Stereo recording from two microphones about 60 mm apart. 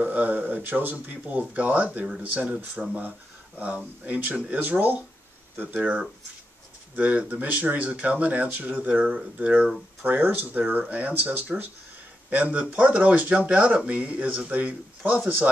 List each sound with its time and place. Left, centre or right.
0.0 s speech: right
2.8 s speech: centre
3.5 s speech: right
10.0 s speech: right